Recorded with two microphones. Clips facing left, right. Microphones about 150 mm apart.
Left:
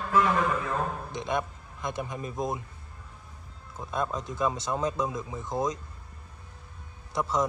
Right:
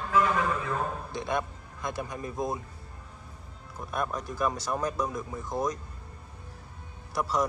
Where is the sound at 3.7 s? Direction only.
20° left (ahead or behind).